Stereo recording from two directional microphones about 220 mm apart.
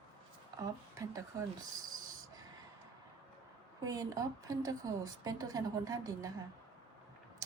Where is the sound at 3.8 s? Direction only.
15° right (ahead or behind).